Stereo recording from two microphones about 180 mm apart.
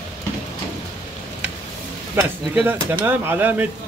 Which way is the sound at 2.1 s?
10° right (ahead or behind).